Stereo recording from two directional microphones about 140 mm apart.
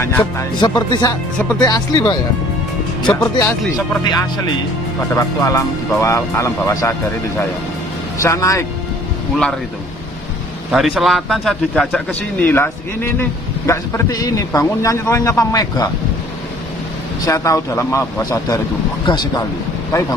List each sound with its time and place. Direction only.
0.4 s a man's voice: 30° left (ahead or behind)
3.0 s speech: 10° left (ahead or behind)
4.0 s speech: 30° left (ahead or behind)
5.1 s a man's voice: 20° left (ahead or behind)
10.7 s a man's voice: centre (ahead or behind)
12.4 s a man's voice: 15° left (ahead or behind)
17.2 s a man's voice: 25° left (ahead or behind)